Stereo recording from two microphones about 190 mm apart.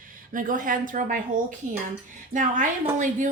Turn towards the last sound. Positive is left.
turn(degrees=-40)  # may be behind; listen again after turning